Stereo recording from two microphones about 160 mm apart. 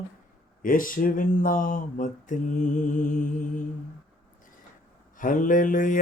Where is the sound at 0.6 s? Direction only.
60° left (ahead or behind).